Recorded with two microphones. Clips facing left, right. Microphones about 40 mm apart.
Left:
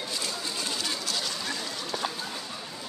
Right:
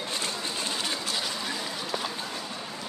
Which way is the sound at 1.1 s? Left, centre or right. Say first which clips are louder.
Right 1 dB; centre.